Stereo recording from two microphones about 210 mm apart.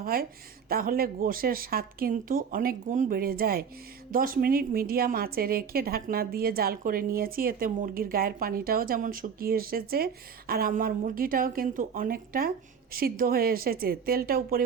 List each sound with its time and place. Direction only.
0.0 s a woman's voice: 45° right (ahead or behind)